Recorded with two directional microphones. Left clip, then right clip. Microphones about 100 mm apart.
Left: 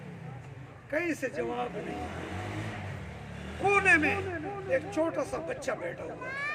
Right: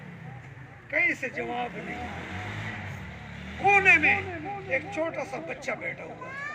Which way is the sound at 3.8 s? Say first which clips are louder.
Right 4 dB; 45° left (ahead or behind).